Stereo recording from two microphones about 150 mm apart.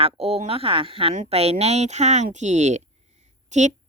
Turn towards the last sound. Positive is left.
turn(degrees=-50)  # may be behind; listen again after turning